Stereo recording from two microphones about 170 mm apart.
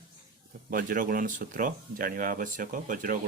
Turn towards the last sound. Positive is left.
turn(degrees=-55)  # may be behind; listen again after turning